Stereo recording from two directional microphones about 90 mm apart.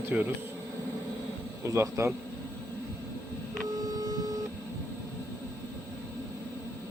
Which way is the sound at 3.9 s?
45° right (ahead or behind).